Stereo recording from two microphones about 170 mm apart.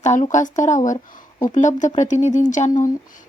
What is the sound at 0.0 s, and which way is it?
A woman's voice, 45° left (ahead or behind).